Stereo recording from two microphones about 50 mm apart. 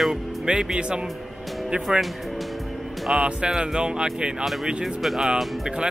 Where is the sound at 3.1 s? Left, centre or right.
Right.